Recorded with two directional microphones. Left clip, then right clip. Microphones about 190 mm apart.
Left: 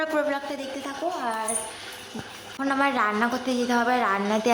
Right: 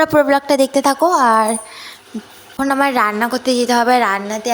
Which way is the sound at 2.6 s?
25° right (ahead or behind).